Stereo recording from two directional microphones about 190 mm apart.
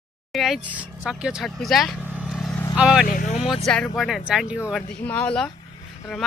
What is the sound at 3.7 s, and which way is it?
Speech, centre (ahead or behind).